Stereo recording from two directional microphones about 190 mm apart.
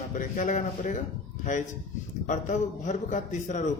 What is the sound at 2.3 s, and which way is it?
Speech, 40° left (ahead or behind).